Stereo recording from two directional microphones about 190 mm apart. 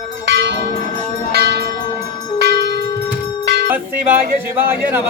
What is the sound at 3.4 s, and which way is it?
Music, 60° right (ahead or behind).